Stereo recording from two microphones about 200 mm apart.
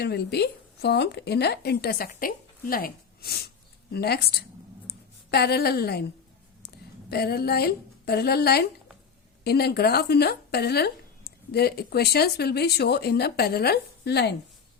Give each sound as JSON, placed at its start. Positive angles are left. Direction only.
{"t": 0.0, "sound": "speech", "side_deg": 55}
{"t": 7.1, "sound": "speech", "side_deg": 50}